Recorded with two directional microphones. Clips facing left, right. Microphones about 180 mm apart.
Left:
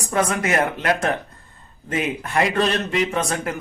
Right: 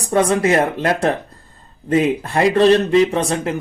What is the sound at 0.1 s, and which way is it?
Speech, 30° right (ahead or behind).